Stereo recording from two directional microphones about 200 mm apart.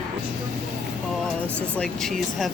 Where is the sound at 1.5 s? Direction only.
5° left (ahead or behind).